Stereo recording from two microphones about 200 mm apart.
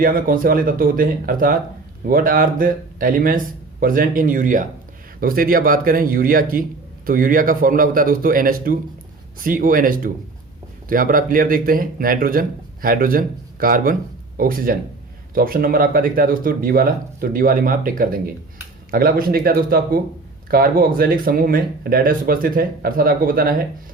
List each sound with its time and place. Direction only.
0.0 s a man's voice: 45° right (ahead or behind)